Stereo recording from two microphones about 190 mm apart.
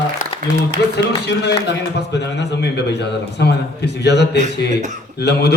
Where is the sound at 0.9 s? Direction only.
60° left (ahead or behind).